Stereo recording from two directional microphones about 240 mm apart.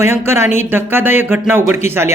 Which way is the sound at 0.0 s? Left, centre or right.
Centre.